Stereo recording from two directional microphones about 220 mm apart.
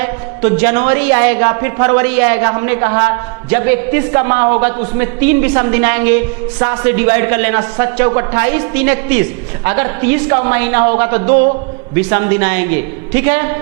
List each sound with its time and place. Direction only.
0.0 s a woman's voice: 15° right (ahead or behind)